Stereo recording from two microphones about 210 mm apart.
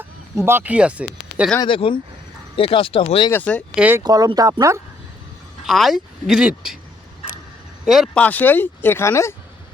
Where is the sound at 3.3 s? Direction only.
5° left (ahead or behind).